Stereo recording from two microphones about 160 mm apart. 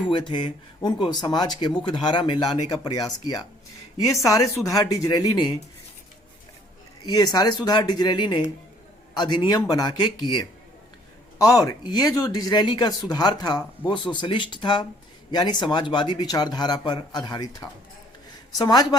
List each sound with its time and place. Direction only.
0.1 s speech: 30° left (ahead or behind)
7.0 s speech: 25° left (ahead or behind)